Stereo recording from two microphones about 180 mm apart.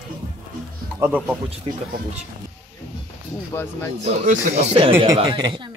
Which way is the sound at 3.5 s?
15° left (ahead or behind).